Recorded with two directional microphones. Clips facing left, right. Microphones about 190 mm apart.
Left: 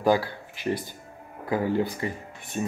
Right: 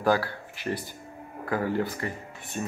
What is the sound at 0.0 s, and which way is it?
Speech, 15° left (ahead or behind).